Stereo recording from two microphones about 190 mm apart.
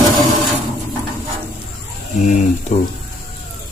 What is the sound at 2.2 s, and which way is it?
Speech, 40° left (ahead or behind).